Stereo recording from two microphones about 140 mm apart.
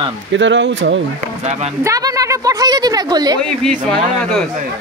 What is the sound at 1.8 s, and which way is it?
A woman's voice, 25° right (ahead or behind).